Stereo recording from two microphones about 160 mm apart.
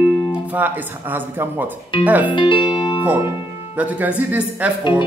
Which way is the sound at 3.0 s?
10° right (ahead or behind).